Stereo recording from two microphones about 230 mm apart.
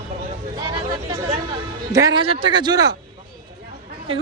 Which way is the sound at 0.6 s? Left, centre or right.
Centre.